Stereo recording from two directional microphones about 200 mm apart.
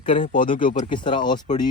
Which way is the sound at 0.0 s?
25° left (ahead or behind).